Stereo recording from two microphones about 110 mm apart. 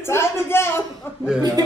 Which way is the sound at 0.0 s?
20° left (ahead or behind).